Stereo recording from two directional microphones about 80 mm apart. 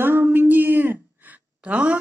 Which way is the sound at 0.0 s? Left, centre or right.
Right.